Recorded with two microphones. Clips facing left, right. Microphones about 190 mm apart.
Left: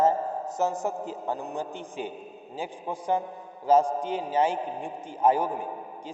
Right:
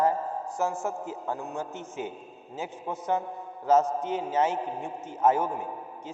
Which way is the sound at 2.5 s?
30° left (ahead or behind).